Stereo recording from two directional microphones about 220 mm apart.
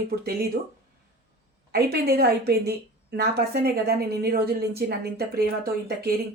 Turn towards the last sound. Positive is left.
turn(degrees=-45)  # may be behind; listen again after turning